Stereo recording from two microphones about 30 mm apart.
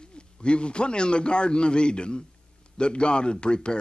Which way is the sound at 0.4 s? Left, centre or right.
Left.